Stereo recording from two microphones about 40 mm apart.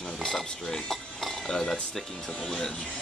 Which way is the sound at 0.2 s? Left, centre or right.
Centre.